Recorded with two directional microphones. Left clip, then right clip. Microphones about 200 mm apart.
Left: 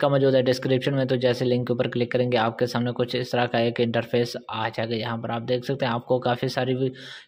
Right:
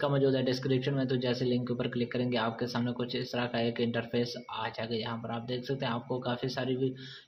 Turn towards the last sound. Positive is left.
turn(degrees=50)  # may be behind; listen again after turning